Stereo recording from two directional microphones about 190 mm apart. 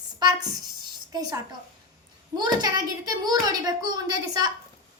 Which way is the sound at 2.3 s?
20° right (ahead or behind).